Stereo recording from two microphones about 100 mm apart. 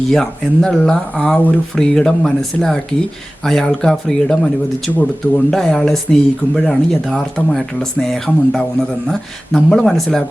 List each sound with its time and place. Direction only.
0.1 s speech: 5° left (ahead or behind)
5.5 s speech: 5° left (ahead or behind)